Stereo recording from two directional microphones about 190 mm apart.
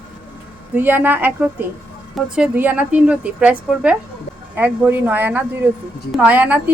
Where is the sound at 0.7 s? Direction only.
10° right (ahead or behind).